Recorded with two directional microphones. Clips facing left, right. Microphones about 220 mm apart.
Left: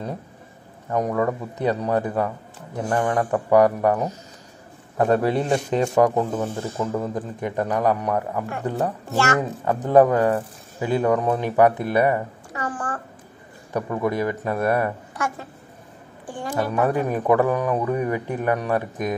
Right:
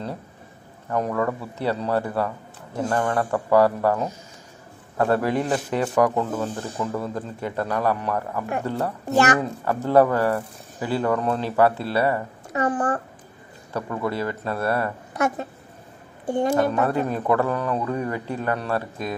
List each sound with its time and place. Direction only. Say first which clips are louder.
0.8 s speech: left 2 dB; 15° left (ahead or behind)
9.1 s speech: right 4 dB; 15° right (ahead or behind)
9.4 s speech: left 1 dB; 15° left (ahead or behind)
12.7 s a woman's voice: right 6 dB; 35° right (ahead or behind)
13.7 s speech: left 3 dB; 15° left (ahead or behind)
15.1 s a woman's voice: right 5 dB; 20° right (ahead or behind)
16.7 s speech: left 1 dB; 15° left (ahead or behind)